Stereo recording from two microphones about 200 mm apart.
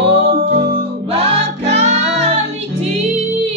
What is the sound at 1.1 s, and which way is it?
Music, 30° right (ahead or behind).